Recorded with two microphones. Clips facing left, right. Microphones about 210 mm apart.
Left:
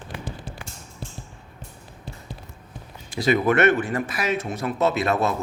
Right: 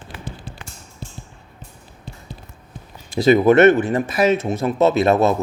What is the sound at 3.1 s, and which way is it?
Speech, 25° right (ahead or behind).